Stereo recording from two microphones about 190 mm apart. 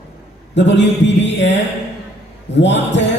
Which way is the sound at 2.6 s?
70° left (ahead or behind).